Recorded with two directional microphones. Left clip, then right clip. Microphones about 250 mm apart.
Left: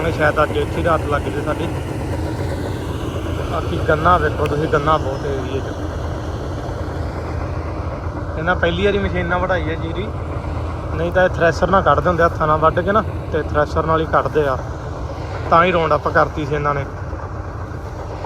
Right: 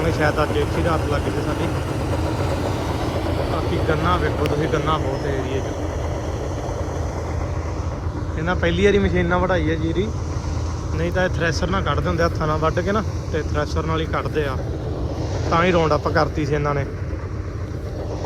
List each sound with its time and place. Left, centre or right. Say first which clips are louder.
0.0 s speech: left 4 dB; centre
3.0 s vehicle: right 2 dB; right
3.8 s speech: left 8 dB; centre
4.3 s speech: left 2 dB; right
4.7 s speech: left 9 dB; centre
5.4 s speech: left 1 dB; right
8.4 s a man's voice: left 3 dB; centre
9.6 s speech: right 2 dB; right
10.9 s a man's voice: left 6 dB; centre